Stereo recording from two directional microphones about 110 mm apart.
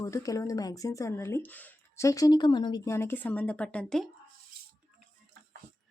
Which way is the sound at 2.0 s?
30° left (ahead or behind).